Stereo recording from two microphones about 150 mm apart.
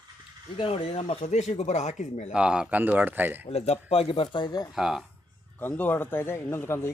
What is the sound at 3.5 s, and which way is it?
Speech, 45° left (ahead or behind).